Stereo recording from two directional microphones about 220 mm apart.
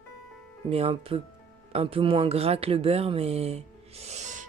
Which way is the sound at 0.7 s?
25° right (ahead or behind).